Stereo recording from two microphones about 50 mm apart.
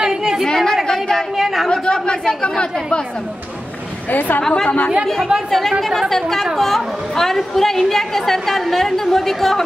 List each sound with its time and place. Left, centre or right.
0.0 s chatter: centre
0.5 s a woman's voice: centre
1.3 s a woman's voice: centre
1.7 s speech: centre
4.1 s a woman's voice: left
4.4 s speech: centre
4.6 s speech: left
5.0 s a woman's voice: centre